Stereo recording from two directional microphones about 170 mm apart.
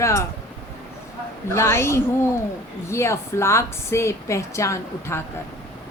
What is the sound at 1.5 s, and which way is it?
A woman's voice, 15° left (ahead or behind).